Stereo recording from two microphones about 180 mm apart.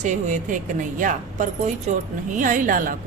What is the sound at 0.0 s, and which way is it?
A woman's voice, 40° right (ahead or behind).